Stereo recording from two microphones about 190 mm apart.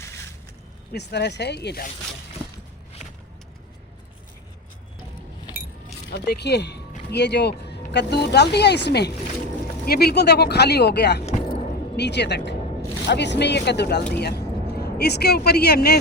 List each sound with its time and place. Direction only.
0.9 s speech: 65° left (ahead or behind)
6.1 s speech: 60° left (ahead or behind)
11.3 s vehicle: 35° left (ahead or behind)
11.9 s speech: 65° left (ahead or behind)